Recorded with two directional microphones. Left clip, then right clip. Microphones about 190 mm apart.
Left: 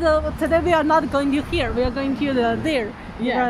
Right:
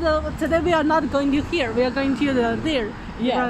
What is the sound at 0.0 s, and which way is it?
Speech, 15° left (ahead or behind).